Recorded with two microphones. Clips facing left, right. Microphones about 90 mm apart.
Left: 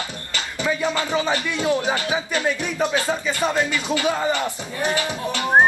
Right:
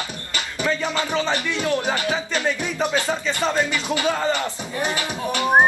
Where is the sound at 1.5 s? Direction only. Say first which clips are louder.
Left 2 dB; 20° left (ahead or behind).